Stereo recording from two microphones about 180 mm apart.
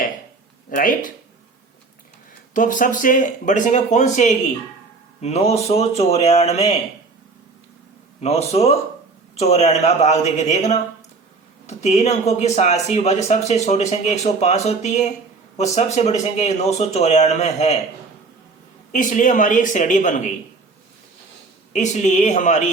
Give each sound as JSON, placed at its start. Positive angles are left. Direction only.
{"t": 0.7, "sound": "speech", "side_deg": 50}
{"t": 2.5, "sound": "speech", "side_deg": 45}
{"t": 8.2, "sound": "speech", "side_deg": 35}
{"t": 18.9, "sound": "speech", "side_deg": 45}
{"t": 21.7, "sound": "speech", "side_deg": 40}